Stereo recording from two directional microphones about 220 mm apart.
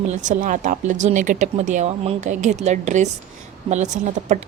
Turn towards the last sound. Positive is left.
turn(degrees=-35)  # may be behind; listen again after turning